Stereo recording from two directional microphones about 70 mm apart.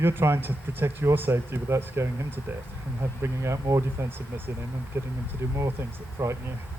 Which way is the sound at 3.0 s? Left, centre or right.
Right.